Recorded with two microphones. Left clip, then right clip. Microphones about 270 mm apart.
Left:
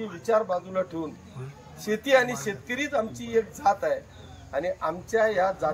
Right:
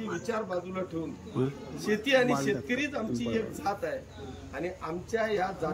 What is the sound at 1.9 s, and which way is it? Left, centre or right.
Speech, centre.